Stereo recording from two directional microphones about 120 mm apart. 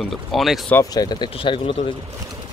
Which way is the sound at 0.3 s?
Centre (ahead or behind).